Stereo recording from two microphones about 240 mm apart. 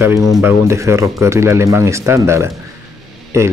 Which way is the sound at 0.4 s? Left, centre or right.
Centre.